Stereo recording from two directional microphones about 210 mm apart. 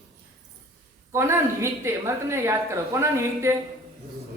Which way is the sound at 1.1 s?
15° right (ahead or behind).